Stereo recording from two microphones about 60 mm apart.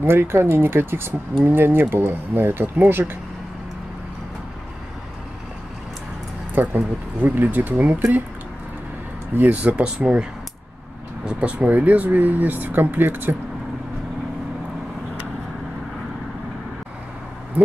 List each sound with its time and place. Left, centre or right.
0.0 s speech: right
6.5 s speech: right
9.3 s speech: right
11.2 s speech: right